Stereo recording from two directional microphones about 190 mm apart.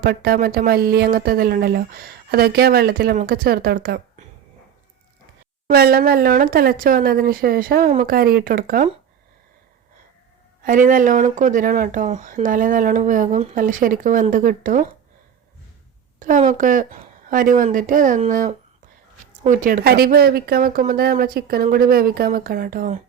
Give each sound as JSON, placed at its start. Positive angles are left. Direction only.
{"t": 0.0, "sound": "speech", "side_deg": -50}
{"t": 5.6, "sound": "speech", "side_deg": -55}
{"t": 10.6, "sound": "speech", "side_deg": -45}
{"t": 16.2, "sound": "speech", "side_deg": -40}